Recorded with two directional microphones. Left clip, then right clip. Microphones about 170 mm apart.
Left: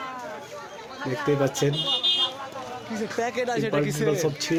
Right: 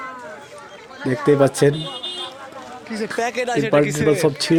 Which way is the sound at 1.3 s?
50° right (ahead or behind).